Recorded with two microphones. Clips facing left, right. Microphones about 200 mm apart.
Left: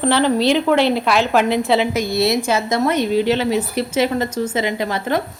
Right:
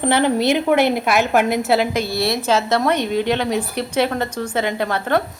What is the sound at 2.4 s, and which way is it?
A woman's voice, 10° left (ahead or behind).